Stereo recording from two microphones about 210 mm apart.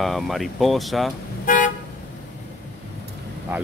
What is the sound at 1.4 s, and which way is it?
Toot, 40° left (ahead or behind).